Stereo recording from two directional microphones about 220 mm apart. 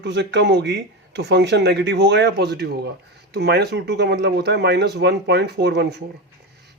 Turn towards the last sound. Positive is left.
turn(degrees=-50)  # may be behind; listen again after turning